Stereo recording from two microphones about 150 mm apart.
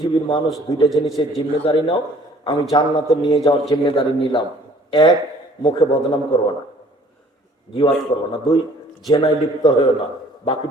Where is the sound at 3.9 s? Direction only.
35° left (ahead or behind).